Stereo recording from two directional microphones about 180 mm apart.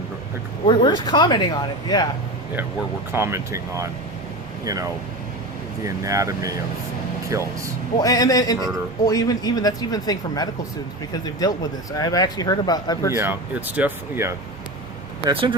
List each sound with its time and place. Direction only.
0.7 s speech: 25° left (ahead or behind)
3.1 s speech: 15° right (ahead or behind)
8.0 s speech: 20° left (ahead or behind)
13.1 s speech: 10° right (ahead or behind)
15.2 s speech: 30° right (ahead or behind)